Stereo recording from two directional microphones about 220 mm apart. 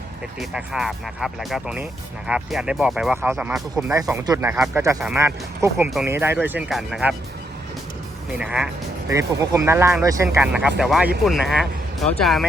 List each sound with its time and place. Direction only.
0.3 s speech: centre (ahead or behind)
8.4 s speech: 5° right (ahead or behind)